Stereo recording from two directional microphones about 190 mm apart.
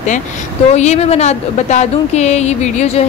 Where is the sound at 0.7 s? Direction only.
35° left (ahead or behind).